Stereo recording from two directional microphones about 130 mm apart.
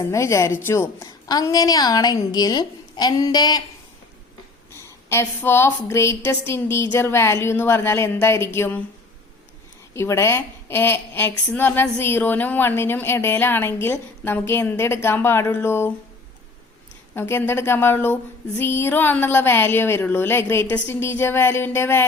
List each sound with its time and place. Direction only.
0.0 s a woman's voice: 25° left (ahead or behind)
4.7 s a woman's voice: 20° left (ahead or behind)
9.9 s a woman's voice: 20° left (ahead or behind)
17.2 s a woman's voice: 15° left (ahead or behind)